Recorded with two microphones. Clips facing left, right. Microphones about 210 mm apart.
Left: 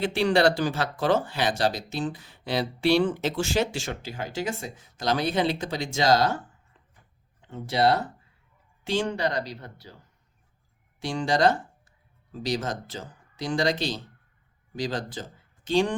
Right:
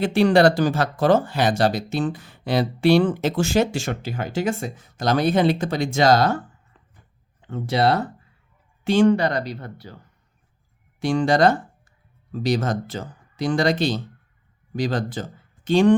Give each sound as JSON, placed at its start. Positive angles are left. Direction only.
{"t": 0.0, "sound": "speech", "side_deg": -45}
{"t": 7.5, "sound": "speech", "side_deg": -65}
{"t": 11.0, "sound": "speech", "side_deg": -55}